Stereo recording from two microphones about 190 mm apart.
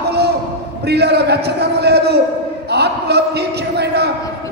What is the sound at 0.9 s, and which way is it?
A man's voice, 60° right (ahead or behind).